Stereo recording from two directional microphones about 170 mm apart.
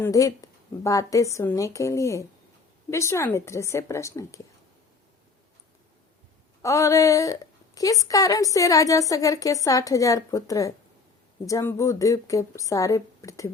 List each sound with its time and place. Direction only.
0.0 s a woman's voice: 20° left (ahead or behind)
6.6 s a woman's voice: 20° left (ahead or behind)